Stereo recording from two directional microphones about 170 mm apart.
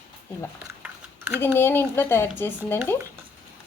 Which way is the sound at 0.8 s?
15° right (ahead or behind).